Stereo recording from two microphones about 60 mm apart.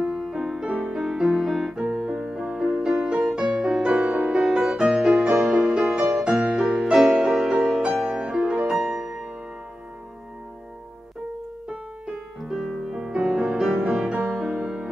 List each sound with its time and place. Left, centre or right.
0.2 s music: centre
2.4 s music: centre
2.8 s music: centre
3.9 s music: right
4.3 s music: centre
5.7 s music: centre
11.7 s music: centre